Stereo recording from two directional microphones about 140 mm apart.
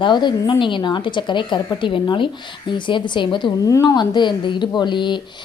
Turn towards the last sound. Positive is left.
turn(degrees=35)  # may be behind; listen again after turning